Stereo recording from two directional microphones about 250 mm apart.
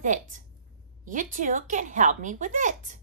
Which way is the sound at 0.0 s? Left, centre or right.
Right.